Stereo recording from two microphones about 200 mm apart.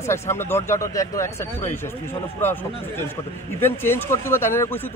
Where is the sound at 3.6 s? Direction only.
10° left (ahead or behind).